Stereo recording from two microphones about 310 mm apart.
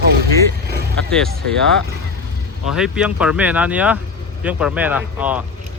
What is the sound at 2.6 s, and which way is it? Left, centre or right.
Speech, centre.